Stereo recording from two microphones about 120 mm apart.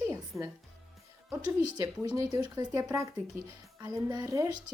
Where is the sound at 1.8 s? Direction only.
30° right (ahead or behind).